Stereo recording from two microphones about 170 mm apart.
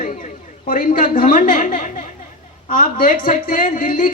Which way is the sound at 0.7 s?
55° left (ahead or behind).